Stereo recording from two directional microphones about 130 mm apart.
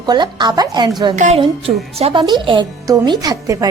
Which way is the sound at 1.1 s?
65° right (ahead or behind).